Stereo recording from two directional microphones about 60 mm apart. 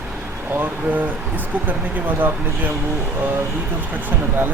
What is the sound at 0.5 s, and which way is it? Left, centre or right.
Speech, right.